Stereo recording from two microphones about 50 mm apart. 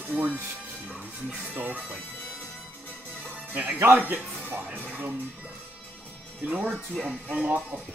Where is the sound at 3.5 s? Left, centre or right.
Right.